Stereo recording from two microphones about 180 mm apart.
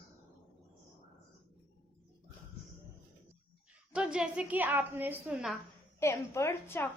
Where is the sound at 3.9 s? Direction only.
5° right (ahead or behind).